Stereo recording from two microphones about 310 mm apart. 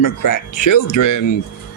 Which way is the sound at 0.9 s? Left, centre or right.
Left.